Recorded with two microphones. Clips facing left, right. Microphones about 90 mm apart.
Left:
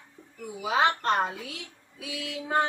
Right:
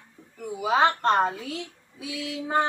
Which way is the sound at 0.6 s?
30° right (ahead or behind).